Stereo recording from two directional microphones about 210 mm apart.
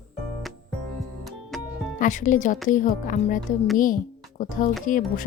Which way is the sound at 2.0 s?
35° left (ahead or behind).